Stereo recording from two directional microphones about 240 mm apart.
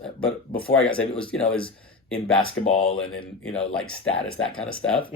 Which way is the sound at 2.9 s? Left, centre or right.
Left.